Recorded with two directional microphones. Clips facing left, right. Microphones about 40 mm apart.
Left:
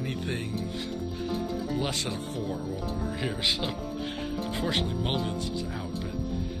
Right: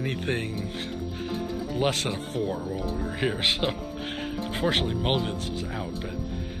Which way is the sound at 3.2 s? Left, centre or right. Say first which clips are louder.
Right 5 dB; right.